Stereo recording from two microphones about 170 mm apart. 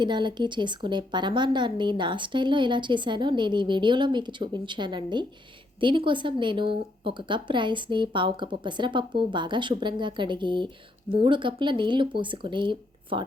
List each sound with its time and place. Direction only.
0.0 s a woman's voice: 25° right (ahead or behind)